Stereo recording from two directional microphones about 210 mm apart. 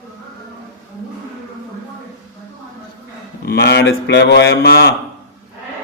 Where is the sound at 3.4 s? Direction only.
50° left (ahead or behind).